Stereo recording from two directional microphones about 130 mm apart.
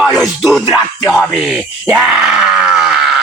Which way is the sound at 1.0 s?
25° left (ahead or behind).